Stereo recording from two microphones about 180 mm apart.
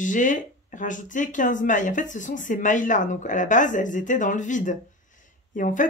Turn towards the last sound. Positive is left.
turn(degrees=45)  # may be behind; listen again after turning